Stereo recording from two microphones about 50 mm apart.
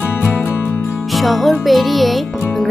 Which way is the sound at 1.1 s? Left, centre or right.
Centre.